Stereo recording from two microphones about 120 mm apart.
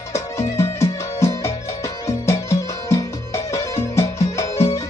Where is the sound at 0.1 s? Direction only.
25° left (ahead or behind).